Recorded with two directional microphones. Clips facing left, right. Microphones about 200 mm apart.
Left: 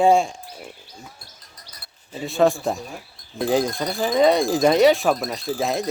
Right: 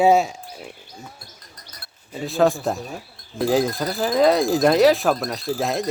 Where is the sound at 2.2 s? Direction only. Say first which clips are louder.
Even; centre (ahead or behind).